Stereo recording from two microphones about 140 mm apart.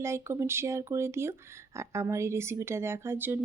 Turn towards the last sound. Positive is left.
turn(degrees=-15)  # may be behind; listen again after turning